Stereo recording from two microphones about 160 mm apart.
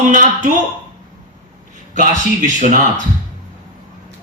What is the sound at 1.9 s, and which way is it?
Speech, 55° right (ahead or behind).